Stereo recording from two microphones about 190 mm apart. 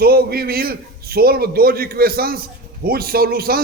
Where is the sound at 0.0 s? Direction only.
55° right (ahead or behind).